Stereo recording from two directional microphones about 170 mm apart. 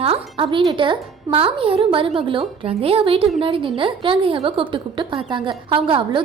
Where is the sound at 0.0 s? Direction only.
35° right (ahead or behind).